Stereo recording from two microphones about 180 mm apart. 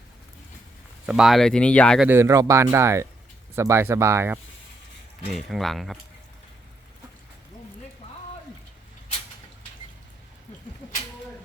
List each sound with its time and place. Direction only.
1.0 s speech: 5° right (ahead or behind)
2.0 s speech: 15° right (ahead or behind)
5.3 s speech: centre (ahead or behind)